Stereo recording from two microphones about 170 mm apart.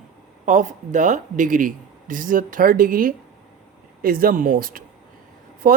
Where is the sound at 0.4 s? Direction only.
50° right (ahead or behind).